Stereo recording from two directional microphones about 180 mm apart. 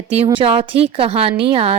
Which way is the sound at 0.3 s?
30° right (ahead or behind).